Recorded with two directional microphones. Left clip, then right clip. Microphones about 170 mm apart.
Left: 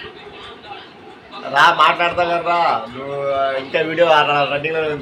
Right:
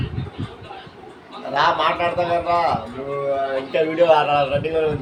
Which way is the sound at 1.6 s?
Centre (ahead or behind).